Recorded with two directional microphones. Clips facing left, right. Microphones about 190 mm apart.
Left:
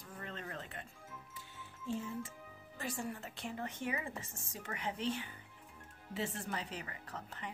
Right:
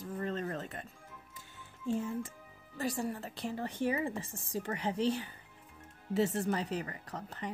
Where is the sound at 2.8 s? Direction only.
40° right (ahead or behind).